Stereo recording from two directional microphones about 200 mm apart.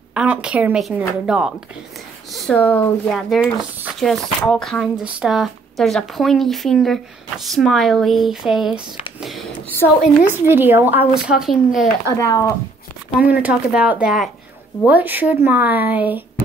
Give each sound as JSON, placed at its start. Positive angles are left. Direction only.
{"t": 0.1, "sound": "speech", "side_deg": -5}
{"t": 10.3, "sound": "a child's voice", "side_deg": -10}
{"t": 12.2, "sound": "speech", "side_deg": 15}
{"t": 13.2, "sound": "a child's voice", "side_deg": -10}